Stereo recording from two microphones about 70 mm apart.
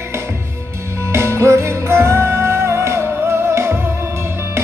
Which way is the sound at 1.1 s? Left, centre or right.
Right.